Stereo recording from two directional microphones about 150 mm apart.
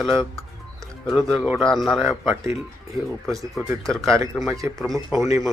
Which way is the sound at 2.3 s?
20° right (ahead or behind).